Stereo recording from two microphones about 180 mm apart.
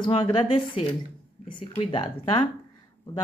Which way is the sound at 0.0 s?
25° left (ahead or behind).